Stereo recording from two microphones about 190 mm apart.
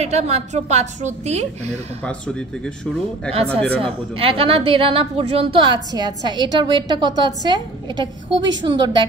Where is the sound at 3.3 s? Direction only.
30° right (ahead or behind).